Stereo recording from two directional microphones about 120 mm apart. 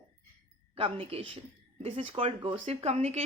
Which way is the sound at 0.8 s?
50° right (ahead or behind).